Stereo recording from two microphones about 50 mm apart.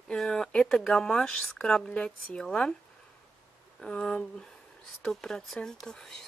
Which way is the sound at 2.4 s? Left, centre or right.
Centre.